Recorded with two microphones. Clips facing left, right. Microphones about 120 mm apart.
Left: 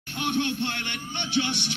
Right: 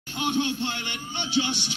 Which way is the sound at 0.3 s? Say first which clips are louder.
Even; 60° left (ahead or behind).